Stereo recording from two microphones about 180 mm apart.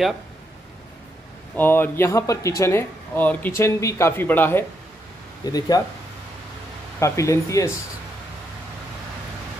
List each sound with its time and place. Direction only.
1.6 s speech: 10° left (ahead or behind)
7.0 s speech: 15° left (ahead or behind)